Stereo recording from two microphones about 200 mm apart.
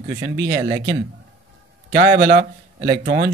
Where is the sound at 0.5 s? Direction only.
20° right (ahead or behind).